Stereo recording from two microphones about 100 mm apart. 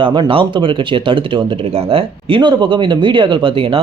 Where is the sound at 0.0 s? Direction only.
55° right (ahead or behind).